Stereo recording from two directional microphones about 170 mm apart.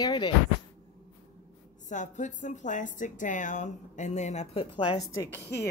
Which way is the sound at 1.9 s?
45° left (ahead or behind).